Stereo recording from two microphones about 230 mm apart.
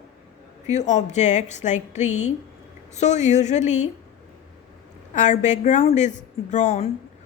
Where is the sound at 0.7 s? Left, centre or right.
Left.